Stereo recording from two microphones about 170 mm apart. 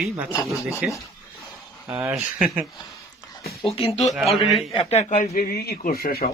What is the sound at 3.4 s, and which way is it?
Speech, 35° left (ahead or behind).